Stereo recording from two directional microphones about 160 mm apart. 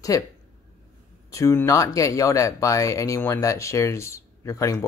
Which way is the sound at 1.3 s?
15° left (ahead or behind).